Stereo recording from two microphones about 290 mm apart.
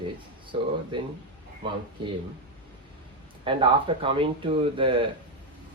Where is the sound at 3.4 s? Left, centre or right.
Centre.